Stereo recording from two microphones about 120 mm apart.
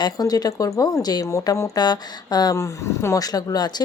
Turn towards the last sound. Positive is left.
turn(degrees=35)  # may be behind; listen again after turning